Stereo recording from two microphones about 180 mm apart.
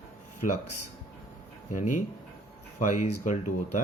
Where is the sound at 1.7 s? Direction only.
45° left (ahead or behind).